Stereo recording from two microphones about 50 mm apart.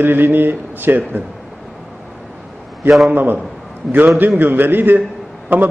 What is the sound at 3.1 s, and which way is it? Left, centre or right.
Speech, right.